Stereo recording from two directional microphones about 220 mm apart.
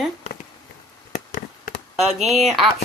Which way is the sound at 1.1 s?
35° left (ahead or behind).